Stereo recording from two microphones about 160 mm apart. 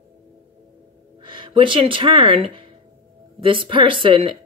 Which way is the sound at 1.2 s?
30° right (ahead or behind).